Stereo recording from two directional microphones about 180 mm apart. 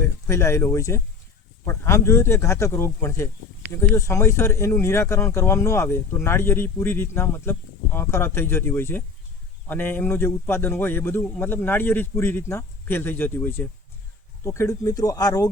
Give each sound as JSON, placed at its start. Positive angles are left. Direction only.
{"t": 0.0, "sound": "a man's voice", "side_deg": 15}